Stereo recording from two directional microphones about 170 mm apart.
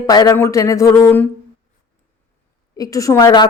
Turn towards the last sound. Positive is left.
turn(degrees=25)  # may be behind; listen again after turning